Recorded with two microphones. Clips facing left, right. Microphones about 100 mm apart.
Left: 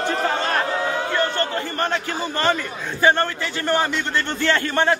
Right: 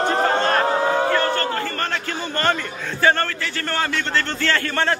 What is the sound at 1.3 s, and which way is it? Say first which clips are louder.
A man's voice: even; 15° left (ahead or behind).